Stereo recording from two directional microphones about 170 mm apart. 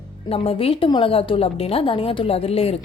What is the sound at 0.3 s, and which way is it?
Speech, 35° left (ahead or behind).